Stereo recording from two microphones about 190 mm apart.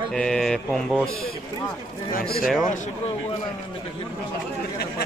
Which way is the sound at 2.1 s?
55° left (ahead or behind).